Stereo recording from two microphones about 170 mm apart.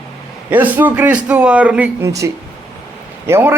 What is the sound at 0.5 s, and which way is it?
A man's voice, 10° right (ahead or behind).